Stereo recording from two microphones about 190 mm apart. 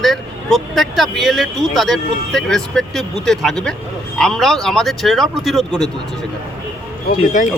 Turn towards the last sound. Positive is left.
turn(degrees=45)  # may be behind; listen again after turning